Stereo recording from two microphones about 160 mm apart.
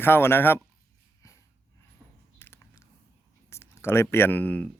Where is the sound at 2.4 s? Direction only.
15° left (ahead or behind).